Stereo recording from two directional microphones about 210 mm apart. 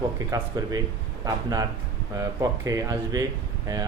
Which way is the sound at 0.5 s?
15° right (ahead or behind).